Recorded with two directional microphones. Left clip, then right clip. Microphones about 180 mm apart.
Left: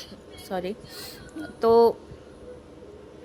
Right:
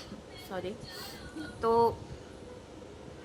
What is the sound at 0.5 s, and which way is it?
A woman's voice, 30° left (ahead or behind).